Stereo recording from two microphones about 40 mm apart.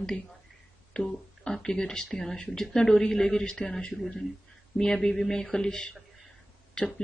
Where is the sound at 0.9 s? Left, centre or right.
Centre.